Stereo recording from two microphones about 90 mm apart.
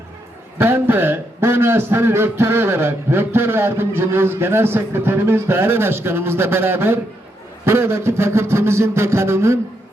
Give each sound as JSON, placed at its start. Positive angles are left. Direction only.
{"t": 0.6, "sound": "a man's voice", "side_deg": -25}